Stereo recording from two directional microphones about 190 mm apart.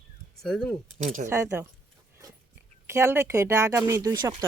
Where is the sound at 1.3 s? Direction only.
15° right (ahead or behind).